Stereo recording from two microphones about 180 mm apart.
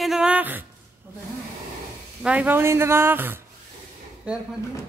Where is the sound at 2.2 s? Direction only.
10° right (ahead or behind).